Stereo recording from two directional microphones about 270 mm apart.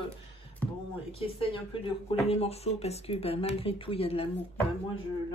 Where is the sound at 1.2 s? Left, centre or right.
Centre.